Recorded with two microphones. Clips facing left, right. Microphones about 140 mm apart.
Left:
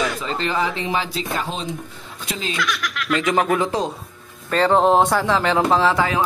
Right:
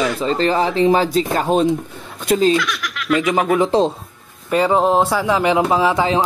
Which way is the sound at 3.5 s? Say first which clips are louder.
Right 6 dB; 25° right (ahead or behind).